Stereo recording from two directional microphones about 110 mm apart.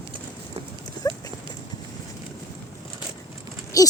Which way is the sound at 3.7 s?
35° left (ahead or behind).